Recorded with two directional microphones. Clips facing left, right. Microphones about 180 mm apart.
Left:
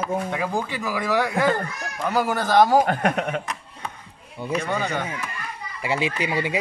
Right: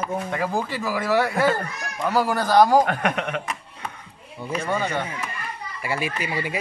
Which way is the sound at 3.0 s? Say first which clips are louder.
Left 2 dB; 35° left (ahead or behind).